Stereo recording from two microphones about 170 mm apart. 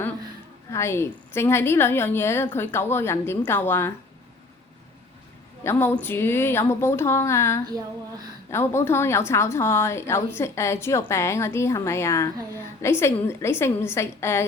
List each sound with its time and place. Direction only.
0.7 s a woman's voice: 15° left (ahead or behind)
5.6 s a woman's voice: 10° left (ahead or behind)